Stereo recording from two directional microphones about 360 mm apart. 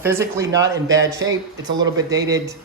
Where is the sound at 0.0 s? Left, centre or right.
Centre.